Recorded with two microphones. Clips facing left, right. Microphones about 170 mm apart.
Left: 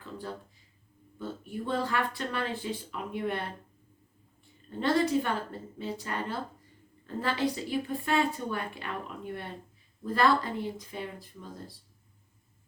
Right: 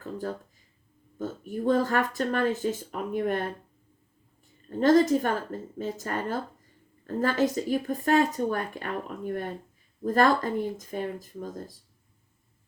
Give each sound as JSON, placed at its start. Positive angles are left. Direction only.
{"t": 0.0, "sound": "a sound", "side_deg": -45}
{"t": 1.2, "sound": "speech", "side_deg": -45}
{"t": 4.8, "sound": "speech", "side_deg": -45}